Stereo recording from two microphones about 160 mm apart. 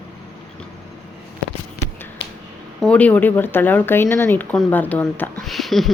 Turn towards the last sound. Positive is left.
turn(degrees=0)  # may be behind; listen again after turning